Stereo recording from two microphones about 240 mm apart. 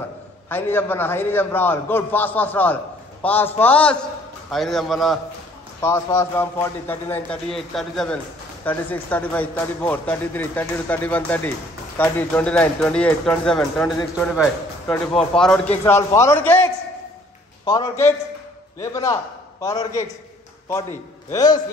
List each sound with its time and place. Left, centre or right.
0.5 s a man's voice: centre
5.8 s a man's voice: centre
21.3 s a man's voice: centre